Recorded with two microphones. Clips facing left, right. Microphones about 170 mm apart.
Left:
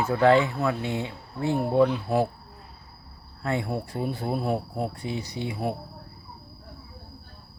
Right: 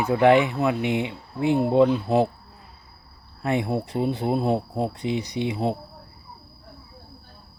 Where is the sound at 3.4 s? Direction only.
20° right (ahead or behind).